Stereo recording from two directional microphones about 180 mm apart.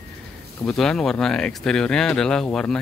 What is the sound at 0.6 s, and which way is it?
Speech, 5° left (ahead or behind).